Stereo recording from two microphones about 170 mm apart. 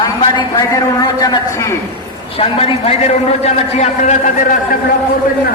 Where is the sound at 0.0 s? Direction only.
25° left (ahead or behind).